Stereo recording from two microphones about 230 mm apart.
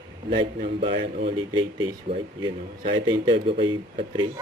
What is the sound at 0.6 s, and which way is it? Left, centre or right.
Speech, right.